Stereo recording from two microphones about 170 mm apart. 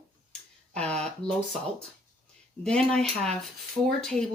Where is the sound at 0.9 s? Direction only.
5° left (ahead or behind).